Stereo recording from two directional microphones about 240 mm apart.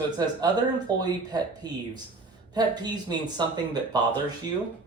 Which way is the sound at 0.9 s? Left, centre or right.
Centre.